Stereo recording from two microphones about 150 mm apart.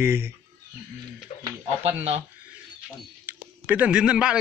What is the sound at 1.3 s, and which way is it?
Speech, 40° left (ahead or behind).